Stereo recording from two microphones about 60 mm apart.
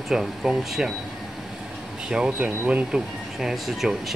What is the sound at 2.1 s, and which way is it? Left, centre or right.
Speech, centre.